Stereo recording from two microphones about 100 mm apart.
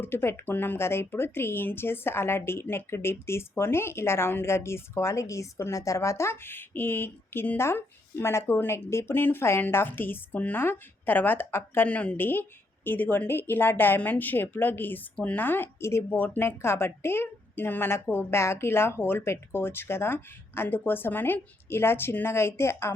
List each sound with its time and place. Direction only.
0.0 s speech: 20° left (ahead or behind)